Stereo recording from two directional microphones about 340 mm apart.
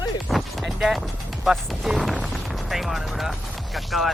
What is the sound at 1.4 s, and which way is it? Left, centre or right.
Speech, centre.